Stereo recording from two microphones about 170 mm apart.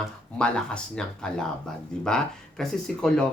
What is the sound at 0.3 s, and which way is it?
Speech, 5° left (ahead or behind).